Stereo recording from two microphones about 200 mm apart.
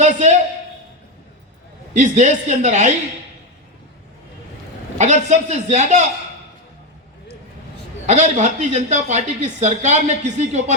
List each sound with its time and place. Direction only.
0.0 s a sound: 35° right (ahead or behind)
1.9 s speech: 35° right (ahead or behind)
4.9 s speech: 35° right (ahead or behind)
8.0 s speech: 35° right (ahead or behind)